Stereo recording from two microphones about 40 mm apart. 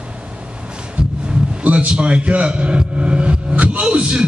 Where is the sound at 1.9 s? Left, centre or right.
Right.